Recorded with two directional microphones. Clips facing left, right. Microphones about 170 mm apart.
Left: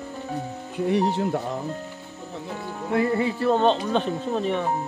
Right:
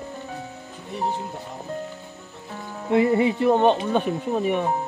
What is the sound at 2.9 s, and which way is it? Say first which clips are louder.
Speech: right 4 dB; 20° right (ahead or behind).